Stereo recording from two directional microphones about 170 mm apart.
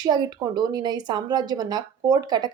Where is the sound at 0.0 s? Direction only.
25° right (ahead or behind).